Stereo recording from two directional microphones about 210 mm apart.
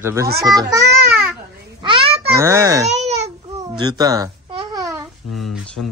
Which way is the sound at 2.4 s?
15° right (ahead or behind).